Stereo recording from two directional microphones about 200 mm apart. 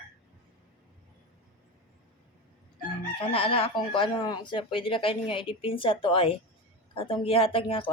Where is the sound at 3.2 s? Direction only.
25° left (ahead or behind).